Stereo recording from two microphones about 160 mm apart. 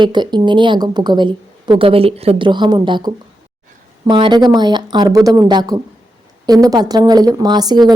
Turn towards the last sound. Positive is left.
turn(degrees=-25)  # may be behind; listen again after turning